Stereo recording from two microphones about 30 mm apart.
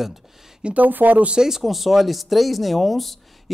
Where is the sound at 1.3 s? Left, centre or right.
Centre.